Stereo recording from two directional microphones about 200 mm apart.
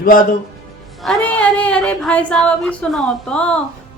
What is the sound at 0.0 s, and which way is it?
Speech, 45° left (ahead or behind).